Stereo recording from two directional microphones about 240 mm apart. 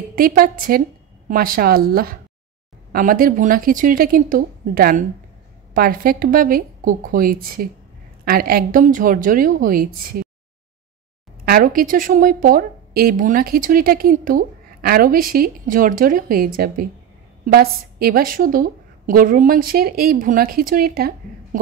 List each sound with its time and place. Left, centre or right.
0.1 s a woman's voice: right
11.4 s a woman's voice: right